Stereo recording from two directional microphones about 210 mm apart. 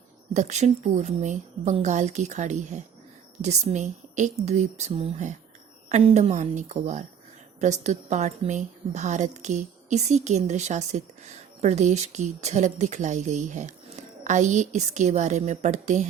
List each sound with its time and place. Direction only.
0.3 s a woman's voice: 35° right (ahead or behind)